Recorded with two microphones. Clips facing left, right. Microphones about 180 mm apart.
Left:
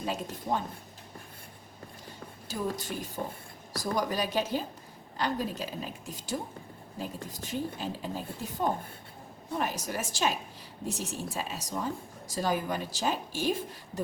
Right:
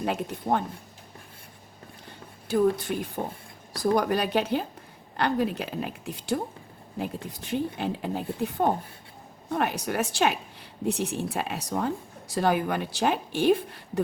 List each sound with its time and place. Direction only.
0.0 s speech: 60° right (ahead or behind)
2.5 s speech: 60° right (ahead or behind)